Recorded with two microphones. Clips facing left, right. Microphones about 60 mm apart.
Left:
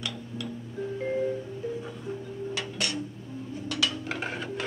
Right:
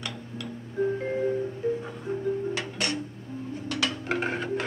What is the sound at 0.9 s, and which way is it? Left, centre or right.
Music, right.